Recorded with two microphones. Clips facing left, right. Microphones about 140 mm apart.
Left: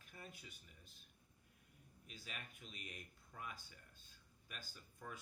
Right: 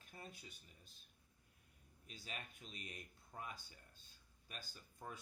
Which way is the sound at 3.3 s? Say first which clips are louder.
Right 1 dB; 30° right (ahead or behind).